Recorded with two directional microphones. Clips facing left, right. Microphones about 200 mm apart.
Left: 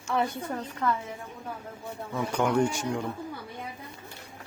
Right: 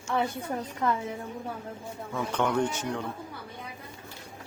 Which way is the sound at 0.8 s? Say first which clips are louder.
Even; 20° right (ahead or behind).